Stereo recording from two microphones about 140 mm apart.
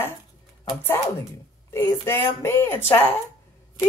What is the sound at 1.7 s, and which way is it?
Speech, 15° left (ahead or behind).